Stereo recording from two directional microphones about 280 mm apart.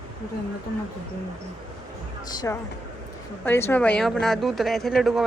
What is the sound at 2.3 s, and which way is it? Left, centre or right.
Speech, centre.